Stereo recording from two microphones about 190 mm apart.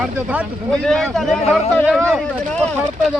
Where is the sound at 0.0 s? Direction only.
5° right (ahead or behind).